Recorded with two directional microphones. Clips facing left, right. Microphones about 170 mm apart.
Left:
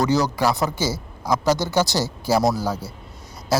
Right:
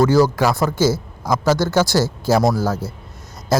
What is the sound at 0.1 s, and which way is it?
Speech, 15° left (ahead or behind).